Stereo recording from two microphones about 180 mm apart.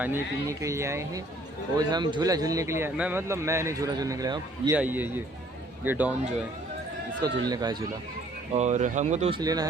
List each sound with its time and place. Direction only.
0.0 s a man's voice: 15° right (ahead or behind)
4.8 s speech: 10° right (ahead or behind)
7.2 s a man's voice: 20° right (ahead or behind)
8.5 s speech: 40° right (ahead or behind)
9.4 s a man's voice: 20° right (ahead or behind)